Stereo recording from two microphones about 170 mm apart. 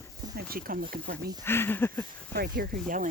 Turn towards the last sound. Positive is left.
turn(degrees=-55)  # may be behind; listen again after turning